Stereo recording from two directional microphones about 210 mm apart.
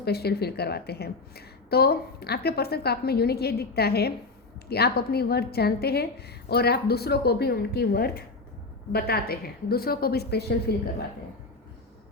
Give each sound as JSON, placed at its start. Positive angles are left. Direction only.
{"t": 0.0, "sound": "a woman's voice", "side_deg": 50}